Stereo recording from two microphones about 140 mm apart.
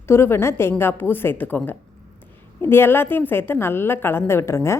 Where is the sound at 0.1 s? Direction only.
15° left (ahead or behind).